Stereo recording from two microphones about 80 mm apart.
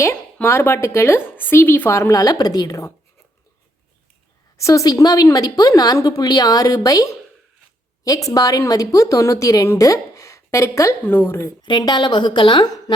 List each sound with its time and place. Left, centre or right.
0.4 s speech: left
1.9 s a woman's voice: left
4.5 s a woman's voice: left
11.0 s speech: left
11.8 s a woman's voice: left